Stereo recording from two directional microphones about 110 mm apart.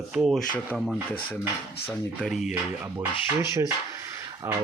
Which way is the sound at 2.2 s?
Centre (ahead or behind).